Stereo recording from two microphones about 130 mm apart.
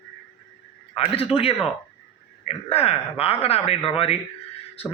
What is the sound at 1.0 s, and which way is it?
Speech, 50° left (ahead or behind).